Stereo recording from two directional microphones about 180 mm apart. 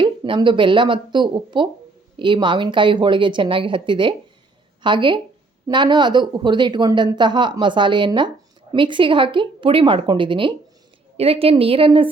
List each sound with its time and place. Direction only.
0.0 s a woman's voice: 25° right (ahead or behind)